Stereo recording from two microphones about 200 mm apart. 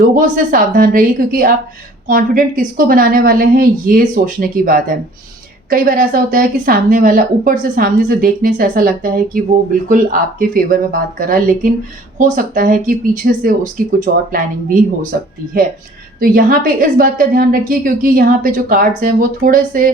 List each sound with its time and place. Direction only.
0.2 s a woman's voice: 45° right (ahead or behind)